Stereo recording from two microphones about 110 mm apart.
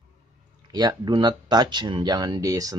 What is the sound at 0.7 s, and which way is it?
Speech, 40° right (ahead or behind).